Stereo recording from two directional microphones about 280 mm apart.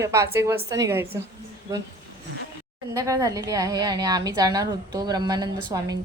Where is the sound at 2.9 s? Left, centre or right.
Centre.